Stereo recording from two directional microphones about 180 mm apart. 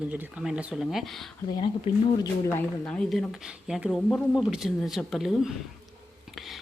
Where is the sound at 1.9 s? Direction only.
30° left (ahead or behind).